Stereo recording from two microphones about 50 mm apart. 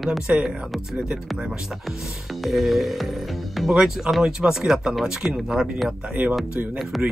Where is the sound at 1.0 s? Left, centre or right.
Centre.